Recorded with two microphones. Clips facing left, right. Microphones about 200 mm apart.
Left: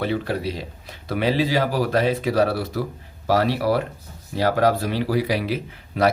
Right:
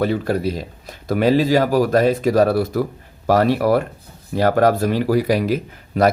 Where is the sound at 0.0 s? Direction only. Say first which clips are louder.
Right 5 dB; 45° right (ahead or behind).